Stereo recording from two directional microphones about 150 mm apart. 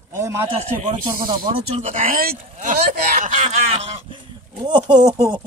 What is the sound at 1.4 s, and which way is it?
Speech, 35° right (ahead or behind).